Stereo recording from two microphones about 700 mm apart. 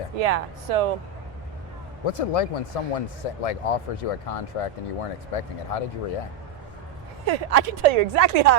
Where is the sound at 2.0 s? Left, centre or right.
Left.